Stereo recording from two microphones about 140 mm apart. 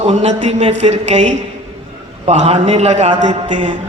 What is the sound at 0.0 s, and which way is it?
A man's voice, 50° right (ahead or behind).